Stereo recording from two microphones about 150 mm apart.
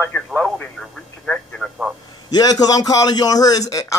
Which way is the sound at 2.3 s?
25° left (ahead or behind).